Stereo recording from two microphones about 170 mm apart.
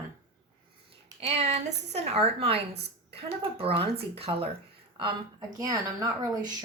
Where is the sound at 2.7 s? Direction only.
75° right (ahead or behind).